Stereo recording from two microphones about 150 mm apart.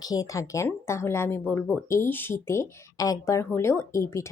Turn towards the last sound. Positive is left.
turn(degrees=20)  # may be behind; listen again after turning